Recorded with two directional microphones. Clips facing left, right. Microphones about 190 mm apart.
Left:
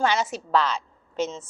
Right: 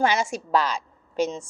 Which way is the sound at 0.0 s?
10° right (ahead or behind).